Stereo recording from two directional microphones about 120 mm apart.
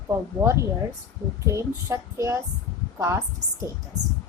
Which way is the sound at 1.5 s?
25° right (ahead or behind).